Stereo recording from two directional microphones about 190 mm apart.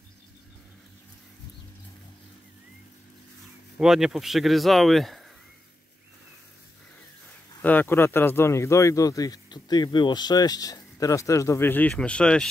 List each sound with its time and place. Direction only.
3.7 s speech: 5° right (ahead or behind)
7.6 s speech: 10° left (ahead or behind)